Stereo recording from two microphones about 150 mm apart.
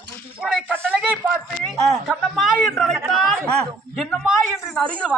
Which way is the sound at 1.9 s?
Centre (ahead or behind).